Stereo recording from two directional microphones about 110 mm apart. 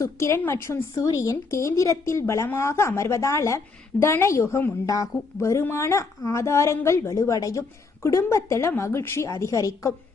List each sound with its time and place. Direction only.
0.0 s speech: 25° left (ahead or behind)